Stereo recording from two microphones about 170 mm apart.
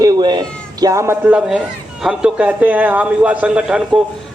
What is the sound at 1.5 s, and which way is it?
Speech, 5° right (ahead or behind).